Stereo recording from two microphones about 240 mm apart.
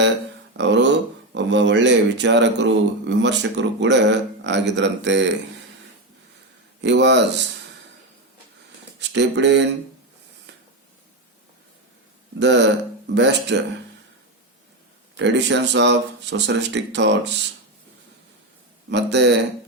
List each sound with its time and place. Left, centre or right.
0.5 s speech: right
6.8 s speech: right
9.0 s speech: right
12.4 s speech: right
15.1 s speech: right
18.9 s speech: right